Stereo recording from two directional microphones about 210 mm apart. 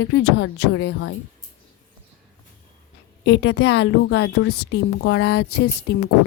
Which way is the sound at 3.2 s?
55° left (ahead or behind).